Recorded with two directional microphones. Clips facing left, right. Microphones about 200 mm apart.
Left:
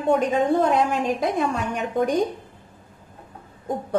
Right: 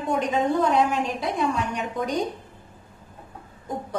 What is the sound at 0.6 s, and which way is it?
A woman's voice, 50° left (ahead or behind).